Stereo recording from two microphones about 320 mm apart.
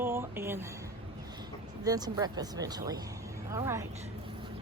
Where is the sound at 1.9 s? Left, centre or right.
Centre.